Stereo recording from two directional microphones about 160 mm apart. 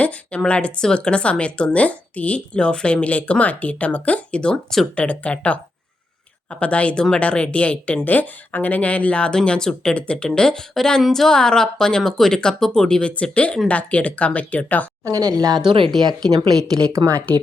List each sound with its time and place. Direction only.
0.0 s speech: 10° left (ahead or behind)
15.0 s speech: 20° right (ahead or behind)
15.9 s speech: centre (ahead or behind)
16.3 s speech: 25° right (ahead or behind)